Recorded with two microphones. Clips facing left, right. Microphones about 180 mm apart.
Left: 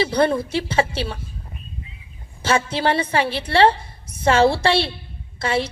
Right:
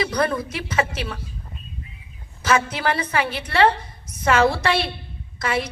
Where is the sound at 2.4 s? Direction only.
30° left (ahead or behind).